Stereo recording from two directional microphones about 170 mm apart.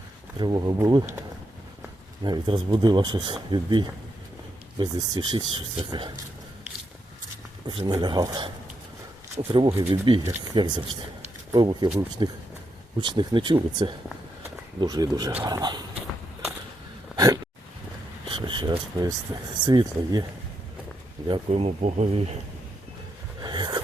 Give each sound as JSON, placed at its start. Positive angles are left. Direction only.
{"t": 0.3, "sound": "speech", "side_deg": -25}
{"t": 2.2, "sound": "speech", "side_deg": -25}
{"t": 7.7, "sound": "speech", "side_deg": -25}
{"t": 15.4, "sound": "dog", "side_deg": -25}
{"t": 17.2, "sound": "a sound", "side_deg": -20}
{"t": 18.3, "sound": "speech", "side_deg": -30}
{"t": 21.2, "sound": "speech", "side_deg": -30}
{"t": 23.4, "sound": "a sound", "side_deg": -25}